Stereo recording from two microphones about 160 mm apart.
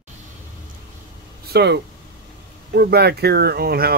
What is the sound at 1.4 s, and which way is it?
Speech, 85° right.